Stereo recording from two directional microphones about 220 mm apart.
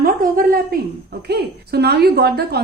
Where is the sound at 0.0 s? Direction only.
40° right (ahead or behind).